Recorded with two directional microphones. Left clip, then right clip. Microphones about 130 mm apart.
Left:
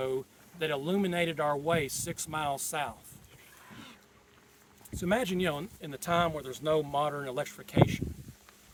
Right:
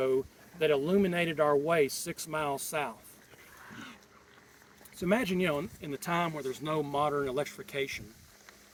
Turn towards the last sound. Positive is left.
turn(degrees=50)  # may be behind; listen again after turning